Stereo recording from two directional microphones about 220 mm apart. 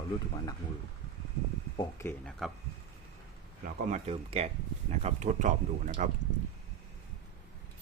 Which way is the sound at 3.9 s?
30° right (ahead or behind).